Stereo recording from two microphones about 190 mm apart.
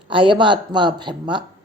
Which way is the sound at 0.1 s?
25° right (ahead or behind).